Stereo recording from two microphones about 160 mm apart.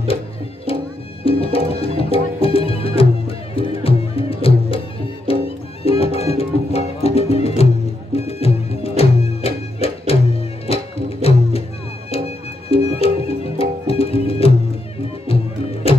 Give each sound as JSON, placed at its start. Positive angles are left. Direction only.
{"t": 0.7, "sound": "music", "side_deg": 35}
{"t": 12.7, "sound": "music", "side_deg": 40}